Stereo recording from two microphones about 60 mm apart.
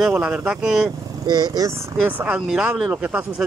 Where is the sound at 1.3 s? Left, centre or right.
Right.